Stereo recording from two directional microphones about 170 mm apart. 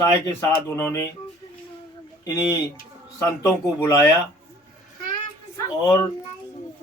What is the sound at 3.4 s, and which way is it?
Speech, 20° left (ahead or behind).